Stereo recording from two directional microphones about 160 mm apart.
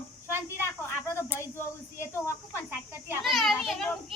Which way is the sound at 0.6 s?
15° left (ahead or behind).